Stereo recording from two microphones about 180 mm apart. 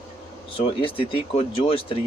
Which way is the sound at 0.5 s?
30° left (ahead or behind).